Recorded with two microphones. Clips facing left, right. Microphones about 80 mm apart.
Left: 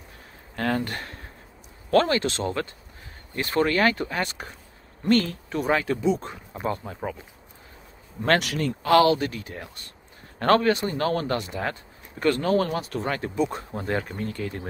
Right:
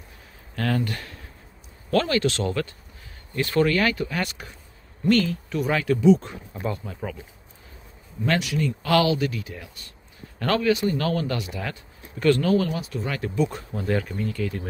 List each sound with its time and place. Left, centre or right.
0.6 s a man's voice: left
8.2 s speech: left
8.8 s a man's voice: left